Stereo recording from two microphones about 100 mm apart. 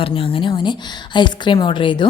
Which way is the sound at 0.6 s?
50° left (ahead or behind).